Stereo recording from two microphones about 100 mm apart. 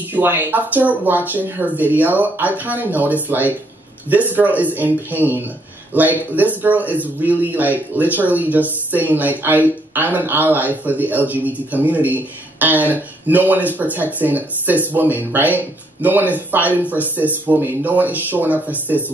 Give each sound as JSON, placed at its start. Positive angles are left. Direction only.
{"t": 0.1, "sound": "speech", "side_deg": -15}